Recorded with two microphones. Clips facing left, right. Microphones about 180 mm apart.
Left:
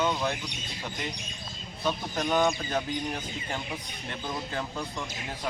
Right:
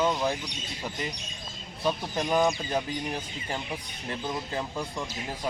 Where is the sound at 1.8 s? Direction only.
10° right (ahead or behind).